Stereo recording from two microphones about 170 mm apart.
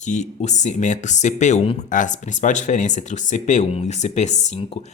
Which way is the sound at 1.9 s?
50° left (ahead or behind).